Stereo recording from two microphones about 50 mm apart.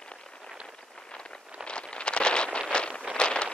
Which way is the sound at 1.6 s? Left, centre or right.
Centre.